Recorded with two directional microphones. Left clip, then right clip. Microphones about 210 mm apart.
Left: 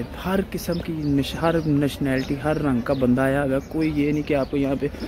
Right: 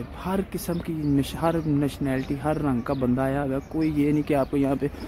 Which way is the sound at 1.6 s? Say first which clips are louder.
Left 3 dB; 5° right (ahead or behind).